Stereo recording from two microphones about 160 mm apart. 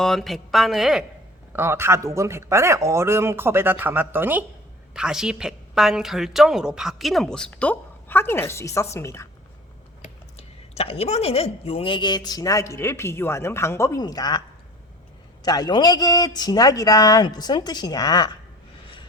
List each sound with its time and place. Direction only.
0.0 s a woman's voice: centre (ahead or behind)
1.5 s a woman's voice: 15° right (ahead or behind); by 9.2 s 20° left (ahead or behind)
10.0 s speech: 40° left (ahead or behind); by 14.4 s 25° left (ahead or behind)
15.4 s speech: 25° left (ahead or behind)